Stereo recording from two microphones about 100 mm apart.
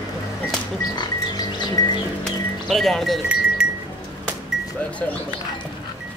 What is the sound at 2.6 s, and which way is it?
Speech, centre (ahead or behind).